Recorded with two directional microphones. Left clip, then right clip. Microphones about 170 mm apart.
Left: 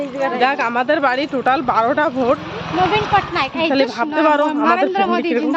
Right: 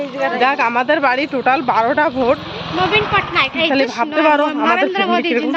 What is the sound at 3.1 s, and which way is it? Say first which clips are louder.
Speech: right 1 dB; 50° left (ahead or behind).